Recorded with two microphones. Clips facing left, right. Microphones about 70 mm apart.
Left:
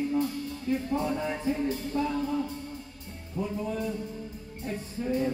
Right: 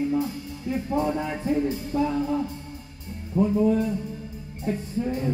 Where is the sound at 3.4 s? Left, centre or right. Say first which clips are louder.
Right 11 dB; right.